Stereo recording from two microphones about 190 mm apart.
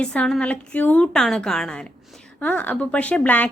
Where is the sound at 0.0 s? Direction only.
5° left (ahead or behind).